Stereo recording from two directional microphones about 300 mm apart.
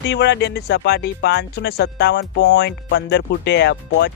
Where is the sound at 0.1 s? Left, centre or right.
Left.